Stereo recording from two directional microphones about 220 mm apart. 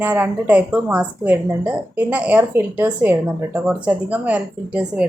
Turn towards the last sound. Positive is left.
turn(degrees=-5)  # may be behind; listen again after turning